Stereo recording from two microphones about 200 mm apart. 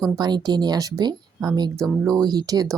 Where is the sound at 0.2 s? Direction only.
20° right (ahead or behind).